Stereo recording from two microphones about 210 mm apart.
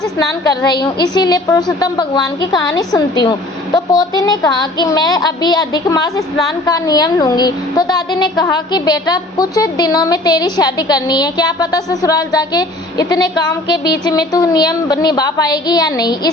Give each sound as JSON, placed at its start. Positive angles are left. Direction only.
{"t": 0.4, "sound": "a woman's voice", "side_deg": 20}